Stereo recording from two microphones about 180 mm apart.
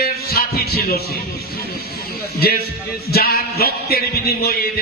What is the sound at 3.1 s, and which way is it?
Music, 60° left (ahead or behind).